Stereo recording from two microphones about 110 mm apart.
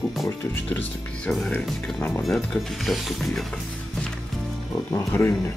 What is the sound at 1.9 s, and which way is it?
Speech, 15° left (ahead or behind).